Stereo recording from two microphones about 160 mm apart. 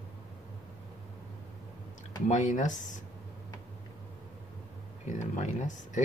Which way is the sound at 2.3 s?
50° left (ahead or behind).